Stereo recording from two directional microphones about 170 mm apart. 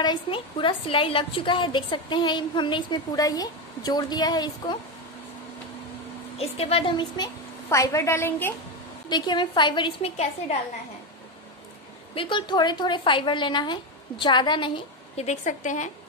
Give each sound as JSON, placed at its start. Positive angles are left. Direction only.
{"t": 0.0, "sound": "a woman's voice", "side_deg": 30}
{"t": 6.3, "sound": "a woman's voice", "side_deg": 35}
{"t": 7.7, "sound": "a woman's voice", "side_deg": 20}
{"t": 9.1, "sound": "a woman's voice", "side_deg": 25}
{"t": 12.2, "sound": "a woman's voice", "side_deg": 30}
{"t": 15.1, "sound": "a woman's voice", "side_deg": 45}